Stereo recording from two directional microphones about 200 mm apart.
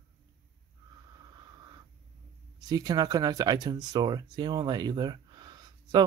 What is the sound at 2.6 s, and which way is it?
Speech, 20° right (ahead or behind).